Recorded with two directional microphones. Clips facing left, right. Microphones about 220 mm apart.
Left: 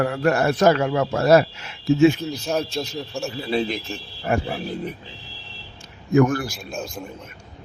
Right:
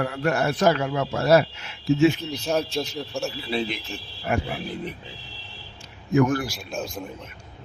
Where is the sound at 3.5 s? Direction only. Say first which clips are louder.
Left 4 dB; 40° left (ahead or behind).